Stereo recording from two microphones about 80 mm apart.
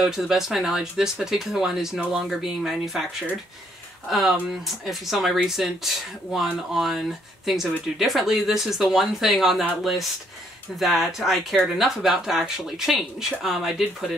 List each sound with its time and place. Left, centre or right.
0.0 s speech: centre
4.1 s speech: centre